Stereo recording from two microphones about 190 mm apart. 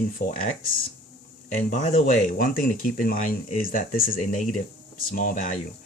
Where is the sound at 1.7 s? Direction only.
40° left (ahead or behind).